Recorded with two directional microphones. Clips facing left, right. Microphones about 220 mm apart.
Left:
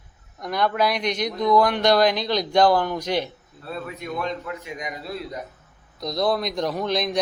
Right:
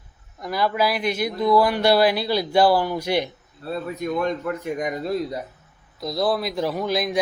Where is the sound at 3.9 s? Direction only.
45° right (ahead or behind).